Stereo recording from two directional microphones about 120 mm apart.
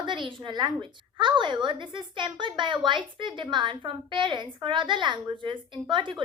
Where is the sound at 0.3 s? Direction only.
45° right (ahead or behind).